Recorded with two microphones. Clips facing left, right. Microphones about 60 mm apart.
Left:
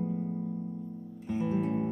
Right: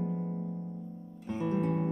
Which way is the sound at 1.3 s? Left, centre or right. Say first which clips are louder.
Left 1 dB; centre.